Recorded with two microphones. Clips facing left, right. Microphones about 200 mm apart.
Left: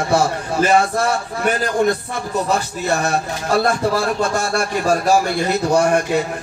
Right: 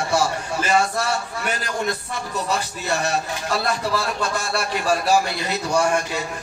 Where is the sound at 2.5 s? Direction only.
50° left (ahead or behind).